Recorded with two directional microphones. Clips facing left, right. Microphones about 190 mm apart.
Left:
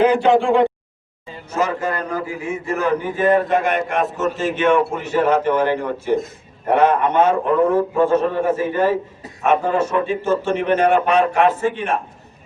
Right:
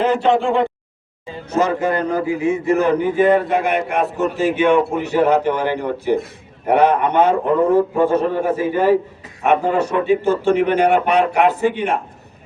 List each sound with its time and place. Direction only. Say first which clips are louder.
0.0 s speech: left 2 dB; centre (ahead or behind)
1.5 s a man's voice: right 4 dB; 20° right (ahead or behind)